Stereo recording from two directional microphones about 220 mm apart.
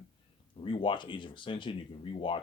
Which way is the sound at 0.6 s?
25° left (ahead or behind).